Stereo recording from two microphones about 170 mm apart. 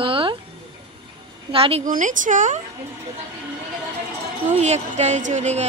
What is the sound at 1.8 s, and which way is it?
Speech, 50° right (ahead or behind).